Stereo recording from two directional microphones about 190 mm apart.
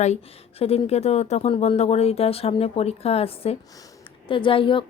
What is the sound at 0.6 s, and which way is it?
A woman's voice, 35° left (ahead or behind).